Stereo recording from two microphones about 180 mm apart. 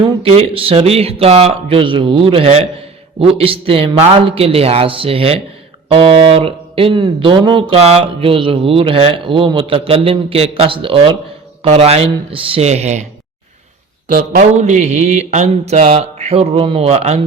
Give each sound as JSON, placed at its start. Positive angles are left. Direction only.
{"t": 0.0, "sound": "speech", "side_deg": -30}
{"t": 14.1, "sound": "speech", "side_deg": -45}